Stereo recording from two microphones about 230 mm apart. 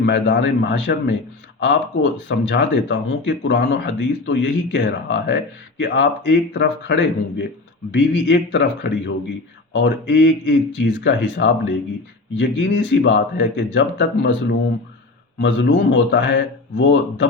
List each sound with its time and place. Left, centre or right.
0.0 s speech: left